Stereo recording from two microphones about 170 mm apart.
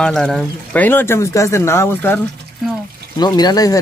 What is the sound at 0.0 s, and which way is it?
Speech, 5° left (ahead or behind).